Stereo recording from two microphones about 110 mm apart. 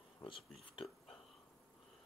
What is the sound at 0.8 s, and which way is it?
Whispering, centre (ahead or behind).